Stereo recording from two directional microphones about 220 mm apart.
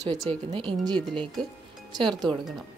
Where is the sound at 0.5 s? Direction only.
25° right (ahead or behind).